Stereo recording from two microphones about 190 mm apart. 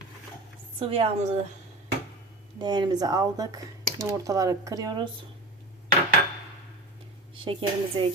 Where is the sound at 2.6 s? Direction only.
25° right (ahead or behind).